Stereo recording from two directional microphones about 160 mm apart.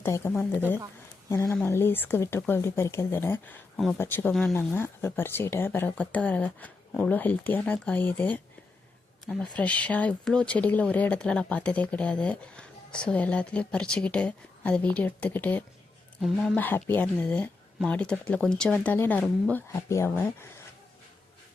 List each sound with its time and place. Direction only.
0.0 s speech: 15° left (ahead or behind)
16.2 s speech: centre (ahead or behind)
16.6 s speech: 10° left (ahead or behind)